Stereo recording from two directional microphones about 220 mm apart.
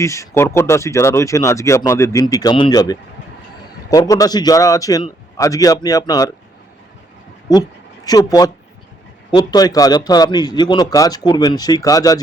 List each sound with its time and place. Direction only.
0.0 s speech: 15° left (ahead or behind)
7.5 s speech: 15° left (ahead or behind)